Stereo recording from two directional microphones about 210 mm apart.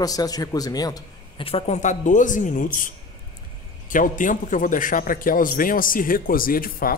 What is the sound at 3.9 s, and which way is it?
A man's voice, 40° left (ahead or behind).